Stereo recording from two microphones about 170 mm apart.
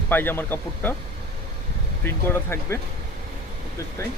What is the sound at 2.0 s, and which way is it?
Speech, 15° left (ahead or behind).